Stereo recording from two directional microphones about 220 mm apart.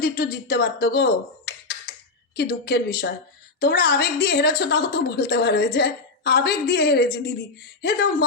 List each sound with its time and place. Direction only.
0.0 s a woman's voice: 45° left (ahead or behind)